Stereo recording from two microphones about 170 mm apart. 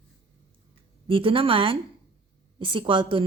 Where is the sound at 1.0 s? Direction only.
30° right (ahead or behind).